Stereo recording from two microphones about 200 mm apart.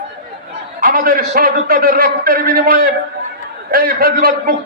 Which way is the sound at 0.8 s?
45° right (ahead or behind).